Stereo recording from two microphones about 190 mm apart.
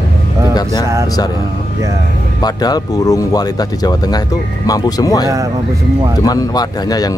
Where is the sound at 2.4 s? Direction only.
20° left (ahead or behind).